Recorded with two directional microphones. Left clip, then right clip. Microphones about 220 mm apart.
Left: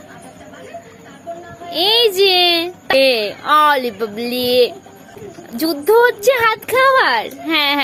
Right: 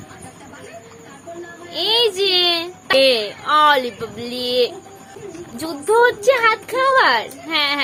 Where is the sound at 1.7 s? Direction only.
25° left (ahead or behind).